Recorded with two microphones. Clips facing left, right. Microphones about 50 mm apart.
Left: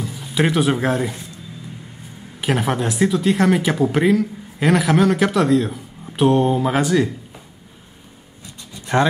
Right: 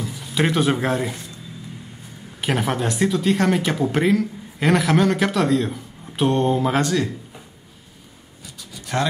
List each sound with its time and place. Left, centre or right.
0.1 s speech: centre
2.4 s speech: centre
8.7 s a sound: left